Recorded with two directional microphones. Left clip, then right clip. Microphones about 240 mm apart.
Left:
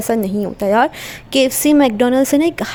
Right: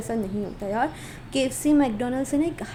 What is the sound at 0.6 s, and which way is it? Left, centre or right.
A woman's voice, left.